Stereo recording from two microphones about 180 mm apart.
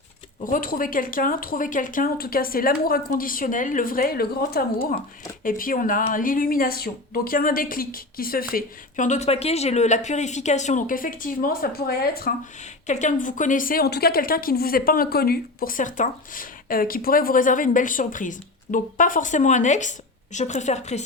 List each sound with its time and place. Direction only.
0.4 s a woman's voice: 50° left (ahead or behind)
12.9 s a woman's voice: 45° left (ahead or behind)